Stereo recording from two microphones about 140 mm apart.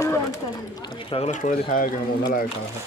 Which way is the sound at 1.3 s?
65° left (ahead or behind).